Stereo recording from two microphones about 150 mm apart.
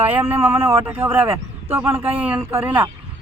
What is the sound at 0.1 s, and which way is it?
A man's voice, 15° right (ahead or behind).